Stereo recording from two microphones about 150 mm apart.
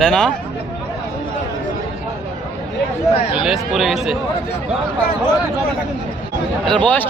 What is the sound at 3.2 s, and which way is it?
Speech, 40° left (ahead or behind).